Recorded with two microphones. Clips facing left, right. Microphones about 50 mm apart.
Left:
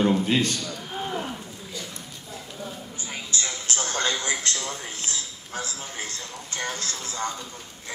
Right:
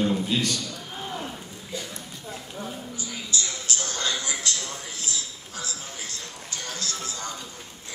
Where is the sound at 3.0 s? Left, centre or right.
Left.